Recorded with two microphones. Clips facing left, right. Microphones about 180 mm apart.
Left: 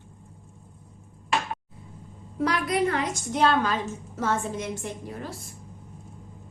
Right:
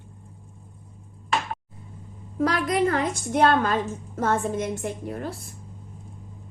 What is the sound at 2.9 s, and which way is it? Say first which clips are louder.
A woman's voice: right 3 dB; 50° right (ahead or behind).